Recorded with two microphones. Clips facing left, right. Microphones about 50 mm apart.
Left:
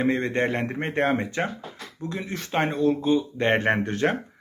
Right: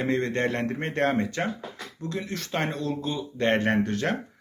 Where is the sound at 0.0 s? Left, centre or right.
Centre.